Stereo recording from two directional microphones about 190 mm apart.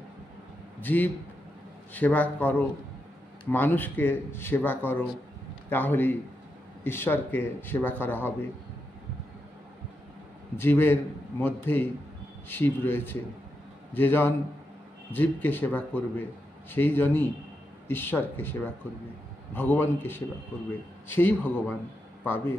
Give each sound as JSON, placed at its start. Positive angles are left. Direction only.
{"t": 0.7, "sound": "a man's voice", "side_deg": 10}
{"t": 10.6, "sound": "speech", "side_deg": 10}